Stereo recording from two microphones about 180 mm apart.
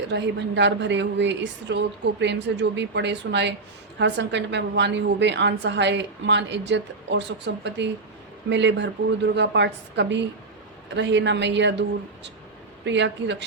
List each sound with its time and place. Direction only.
0.1 s a woman's voice: 75° right (ahead or behind)